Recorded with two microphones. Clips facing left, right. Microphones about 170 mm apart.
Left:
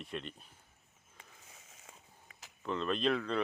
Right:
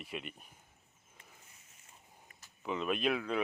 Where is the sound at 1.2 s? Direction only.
90° left.